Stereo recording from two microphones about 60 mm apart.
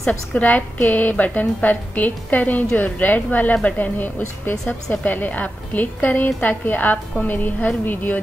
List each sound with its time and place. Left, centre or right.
0.3 s a woman's voice: left